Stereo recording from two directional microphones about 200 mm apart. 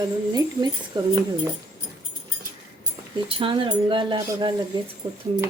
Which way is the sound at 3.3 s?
25° right (ahead or behind).